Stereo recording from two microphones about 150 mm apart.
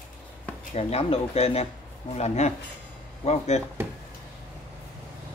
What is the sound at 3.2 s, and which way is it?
Speech, 45° left (ahead or behind).